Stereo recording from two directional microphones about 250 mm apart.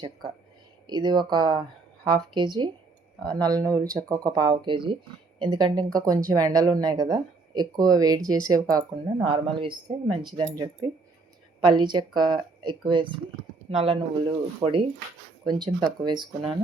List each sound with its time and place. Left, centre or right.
0.9 s speech: centre
11.6 s speech: centre